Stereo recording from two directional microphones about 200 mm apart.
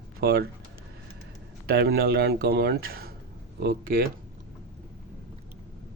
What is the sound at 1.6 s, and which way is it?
Speech, 50° right (ahead or behind).